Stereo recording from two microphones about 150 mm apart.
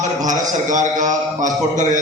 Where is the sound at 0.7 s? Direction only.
55° right (ahead or behind).